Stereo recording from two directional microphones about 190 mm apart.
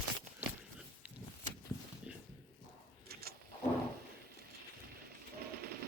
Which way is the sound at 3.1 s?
55° right (ahead or behind).